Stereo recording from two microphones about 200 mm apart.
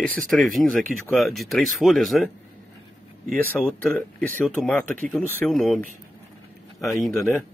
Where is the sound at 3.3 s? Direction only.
5° left (ahead or behind).